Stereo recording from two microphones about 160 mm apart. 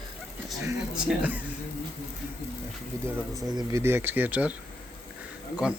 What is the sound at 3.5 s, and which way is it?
Speech, 15° right (ahead or behind).